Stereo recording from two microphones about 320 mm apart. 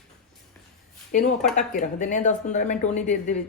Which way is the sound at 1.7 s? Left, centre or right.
Left.